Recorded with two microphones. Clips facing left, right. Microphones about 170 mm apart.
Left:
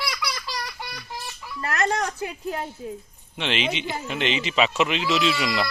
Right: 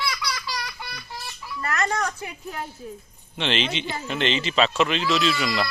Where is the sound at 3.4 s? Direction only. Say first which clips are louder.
Even; 5° left (ahead or behind).